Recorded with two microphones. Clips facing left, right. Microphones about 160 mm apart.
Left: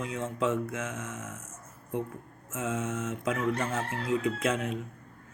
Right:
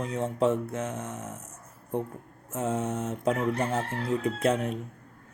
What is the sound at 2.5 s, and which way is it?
Speech, 35° right (ahead or behind).